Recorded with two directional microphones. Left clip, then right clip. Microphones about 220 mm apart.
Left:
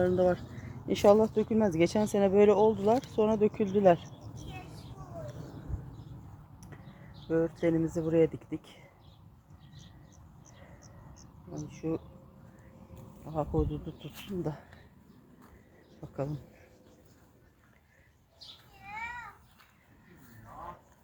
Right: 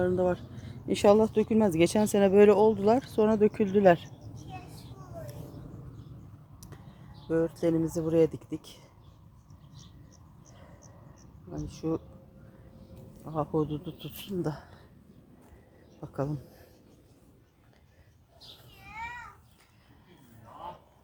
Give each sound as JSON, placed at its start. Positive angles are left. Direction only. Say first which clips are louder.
{"t": 0.0, "sound": "speech", "louder": "left 1 dB", "side_deg": -10}
{"t": 7.3, "sound": "speech", "louder": "right 1 dB", "side_deg": -5}
{"t": 10.8, "sound": "a sound", "louder": "even", "side_deg": -15}
{"t": 11.8, "sound": "speech", "louder": "right 2 dB", "side_deg": -15}
{"t": 13.2, "sound": "speech", "louder": "right 2 dB", "side_deg": -15}
{"t": 16.0, "sound": "a sound", "louder": "right 3 dB", "side_deg": -20}